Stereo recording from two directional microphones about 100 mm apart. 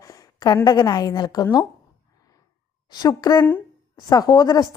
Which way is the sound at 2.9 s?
45° left (ahead or behind).